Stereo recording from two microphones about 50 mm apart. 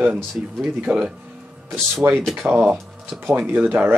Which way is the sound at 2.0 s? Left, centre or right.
Right.